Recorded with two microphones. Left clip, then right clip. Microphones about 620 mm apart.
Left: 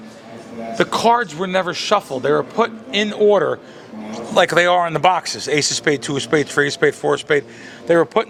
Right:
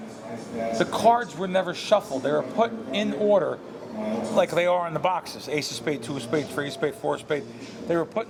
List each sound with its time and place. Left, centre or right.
0.8 s speech: left